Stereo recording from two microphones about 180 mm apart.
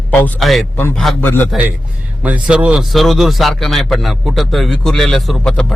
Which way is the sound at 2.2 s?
5° right (ahead or behind).